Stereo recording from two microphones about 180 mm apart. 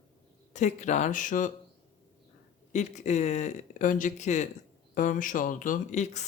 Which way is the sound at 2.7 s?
40° left (ahead or behind).